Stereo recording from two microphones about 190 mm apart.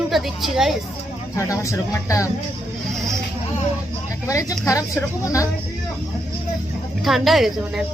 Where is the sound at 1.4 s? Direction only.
15° left (ahead or behind).